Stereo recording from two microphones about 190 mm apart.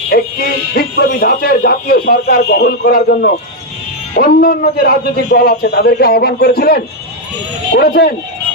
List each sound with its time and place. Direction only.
0.7 s a man's voice: 55° left (ahead or behind)